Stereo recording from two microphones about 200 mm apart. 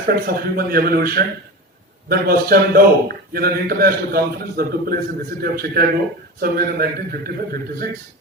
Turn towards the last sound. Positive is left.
turn(degrees=-50)  # may be behind; listen again after turning